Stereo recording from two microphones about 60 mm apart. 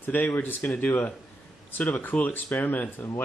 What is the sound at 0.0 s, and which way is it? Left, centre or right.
Speech, left.